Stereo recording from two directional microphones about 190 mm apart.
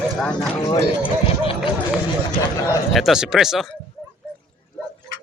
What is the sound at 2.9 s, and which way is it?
Speech, centre (ahead or behind).